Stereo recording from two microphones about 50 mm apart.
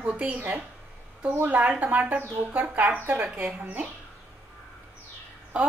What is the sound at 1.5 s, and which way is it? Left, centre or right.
A woman's voice, right.